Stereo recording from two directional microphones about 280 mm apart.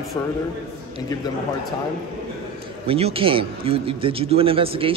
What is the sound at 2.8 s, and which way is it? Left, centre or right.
Speech, centre.